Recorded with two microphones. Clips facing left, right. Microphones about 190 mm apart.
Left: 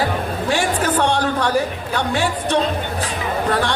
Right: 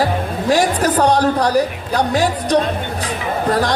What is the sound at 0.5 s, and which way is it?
A woman's voice, 40° right (ahead or behind).